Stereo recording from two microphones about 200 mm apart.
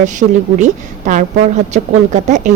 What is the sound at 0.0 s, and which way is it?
A woman's voice, 40° right (ahead or behind).